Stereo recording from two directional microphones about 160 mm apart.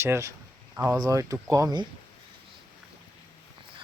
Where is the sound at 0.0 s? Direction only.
15° right (ahead or behind).